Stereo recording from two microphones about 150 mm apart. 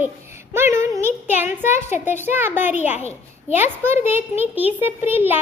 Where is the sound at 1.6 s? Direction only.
50° left (ahead or behind).